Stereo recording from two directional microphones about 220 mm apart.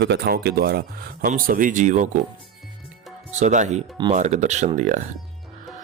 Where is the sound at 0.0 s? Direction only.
50° right (ahead or behind).